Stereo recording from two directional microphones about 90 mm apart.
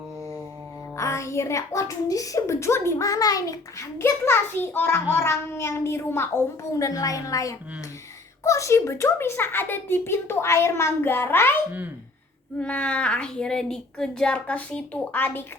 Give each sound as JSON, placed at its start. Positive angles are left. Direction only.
{"t": 0.9, "sound": "a child's voice", "side_deg": 35}
{"t": 12.5, "sound": "speech", "side_deg": 15}